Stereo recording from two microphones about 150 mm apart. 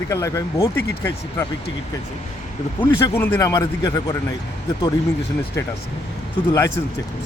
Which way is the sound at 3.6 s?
30° left (ahead or behind).